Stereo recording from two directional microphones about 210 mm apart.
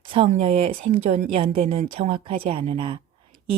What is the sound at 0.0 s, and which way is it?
Speech, 25° right (ahead or behind).